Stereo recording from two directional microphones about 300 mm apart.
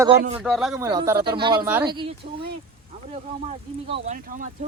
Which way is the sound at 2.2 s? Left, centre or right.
Right.